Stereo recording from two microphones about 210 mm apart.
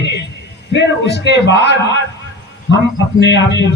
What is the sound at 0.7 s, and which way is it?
A man's voice, 55° left (ahead or behind).